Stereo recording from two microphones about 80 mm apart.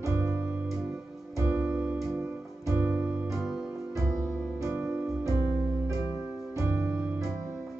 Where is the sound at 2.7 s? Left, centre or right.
Right.